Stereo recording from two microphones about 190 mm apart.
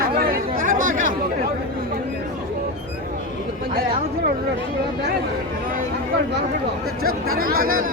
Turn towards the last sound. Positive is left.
turn(degrees=-50)  # may be behind; listen again after turning